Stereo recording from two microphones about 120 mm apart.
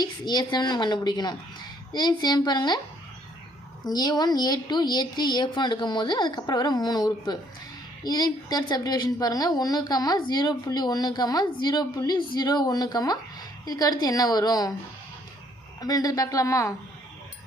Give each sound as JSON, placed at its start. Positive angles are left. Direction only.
{"t": 0.0, "sound": "a woman's voice", "side_deg": 35}
{"t": 3.8, "sound": "a woman's voice", "side_deg": 35}
{"t": 15.8, "sound": "a woman's voice", "side_deg": 30}